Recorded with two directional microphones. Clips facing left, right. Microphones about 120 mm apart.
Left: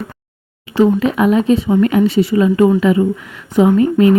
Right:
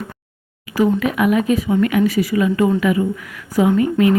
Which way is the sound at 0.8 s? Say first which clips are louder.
Left 4 dB; 30° left (ahead or behind).